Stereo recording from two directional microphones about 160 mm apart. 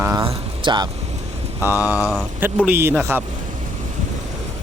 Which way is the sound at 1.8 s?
20° left (ahead or behind).